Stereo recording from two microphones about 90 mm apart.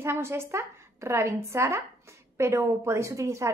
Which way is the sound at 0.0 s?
30° right (ahead or behind).